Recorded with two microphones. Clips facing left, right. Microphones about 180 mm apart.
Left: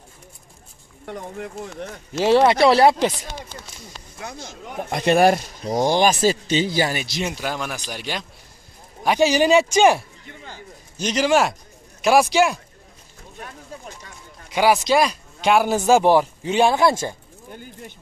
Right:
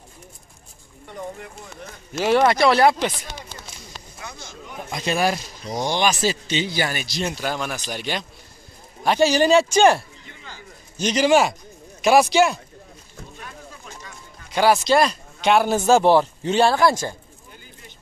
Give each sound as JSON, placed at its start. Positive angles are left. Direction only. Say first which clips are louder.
{"t": 2.1, "sound": "speech", "louder": "left 2 dB", "side_deg": 30}
{"t": 4.2, "sound": "speech", "louder": "left 5 dB", "side_deg": 40}
{"t": 4.9, "sound": "speech", "louder": "left 6 dB", "side_deg": 55}
{"t": 6.8, "sound": "speech", "louder": "left 3 dB", "side_deg": 25}
{"t": 7.2, "sound": "speech", "louder": "right 1 dB", "side_deg": 5}
{"t": 11.0, "sound": "speech", "louder": "right 1 dB", "side_deg": 0}
{"t": 14.5, "sound": "speech", "louder": "even", "side_deg": 10}